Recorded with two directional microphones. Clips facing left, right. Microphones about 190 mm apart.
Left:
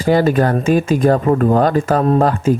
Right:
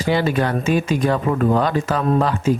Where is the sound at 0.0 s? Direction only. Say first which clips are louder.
Left 5 dB; 45° left (ahead or behind).